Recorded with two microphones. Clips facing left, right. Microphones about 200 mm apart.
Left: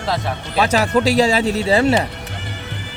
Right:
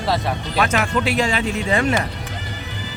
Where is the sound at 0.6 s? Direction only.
40° left (ahead or behind).